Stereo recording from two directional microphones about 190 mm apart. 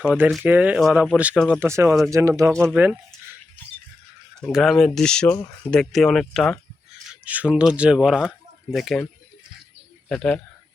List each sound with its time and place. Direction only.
0.0 s speech: 5° right (ahead or behind)
4.4 s speech: centre (ahead or behind)
10.1 s speech: 5° left (ahead or behind)